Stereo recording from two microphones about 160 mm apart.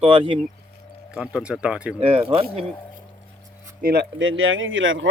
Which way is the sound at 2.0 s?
40° right (ahead or behind).